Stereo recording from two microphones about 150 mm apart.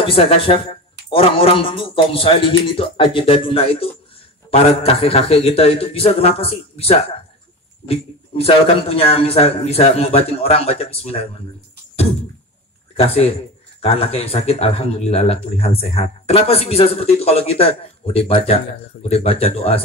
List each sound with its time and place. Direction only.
0.0 s speech: 35° left (ahead or behind)
12.9 s speech: 40° left (ahead or behind)